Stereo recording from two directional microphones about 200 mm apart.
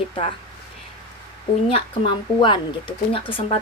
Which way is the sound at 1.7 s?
25° left (ahead or behind).